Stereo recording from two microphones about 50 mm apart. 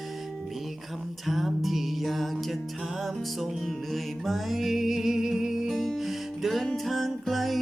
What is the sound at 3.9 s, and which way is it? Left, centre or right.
Music, centre.